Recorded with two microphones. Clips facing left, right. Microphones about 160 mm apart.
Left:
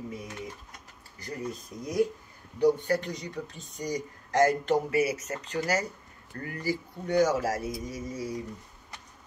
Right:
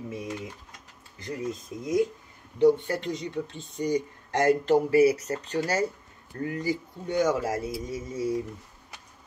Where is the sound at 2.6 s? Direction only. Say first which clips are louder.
Right 3 dB; 25° right (ahead or behind).